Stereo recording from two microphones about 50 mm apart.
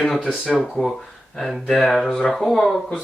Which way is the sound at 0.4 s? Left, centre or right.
Centre.